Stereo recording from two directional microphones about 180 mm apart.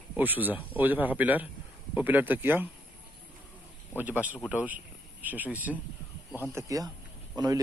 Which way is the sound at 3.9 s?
10° right (ahead or behind).